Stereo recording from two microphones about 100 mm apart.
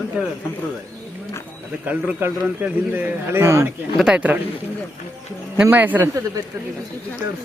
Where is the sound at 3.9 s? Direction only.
10° right (ahead or behind).